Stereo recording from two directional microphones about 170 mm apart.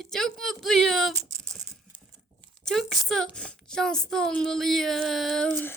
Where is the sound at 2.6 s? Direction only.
Centre (ahead or behind).